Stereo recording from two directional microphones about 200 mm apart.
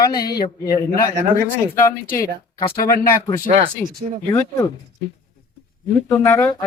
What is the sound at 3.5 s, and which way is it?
Speech, 30° right (ahead or behind).